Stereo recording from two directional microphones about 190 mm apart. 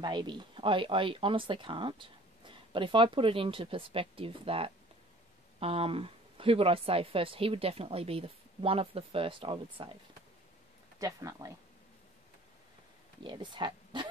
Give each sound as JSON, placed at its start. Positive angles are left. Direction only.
{"t": 0.0, "sound": "speech", "side_deg": -25}
{"t": 11.0, "sound": "speech", "side_deg": -15}
{"t": 13.2, "sound": "speech", "side_deg": -25}